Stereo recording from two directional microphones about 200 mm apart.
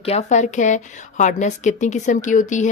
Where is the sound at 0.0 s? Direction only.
35° left (ahead or behind).